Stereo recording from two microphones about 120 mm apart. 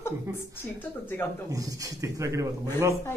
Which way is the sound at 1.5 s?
30° right (ahead or behind).